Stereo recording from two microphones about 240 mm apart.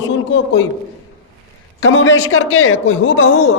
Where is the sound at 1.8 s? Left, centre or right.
Left.